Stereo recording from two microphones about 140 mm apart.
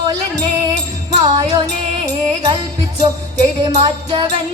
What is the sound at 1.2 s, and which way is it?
Music, 35° right (ahead or behind).